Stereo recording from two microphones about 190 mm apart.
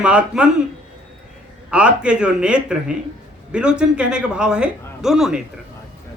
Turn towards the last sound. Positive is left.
turn(degrees=-5)  # may be behind; listen again after turning